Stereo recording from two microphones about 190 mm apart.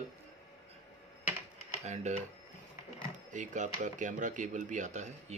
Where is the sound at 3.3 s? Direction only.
40° right (ahead or behind).